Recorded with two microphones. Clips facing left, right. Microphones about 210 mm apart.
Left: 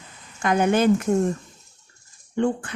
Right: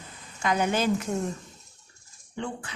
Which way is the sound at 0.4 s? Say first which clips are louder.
Left 6 dB; 55° left (ahead or behind).